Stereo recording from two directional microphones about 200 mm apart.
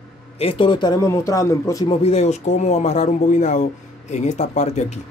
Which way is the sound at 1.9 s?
30° left (ahead or behind).